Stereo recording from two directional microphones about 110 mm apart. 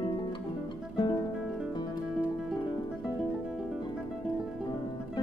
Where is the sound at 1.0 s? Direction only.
40° left (ahead or behind).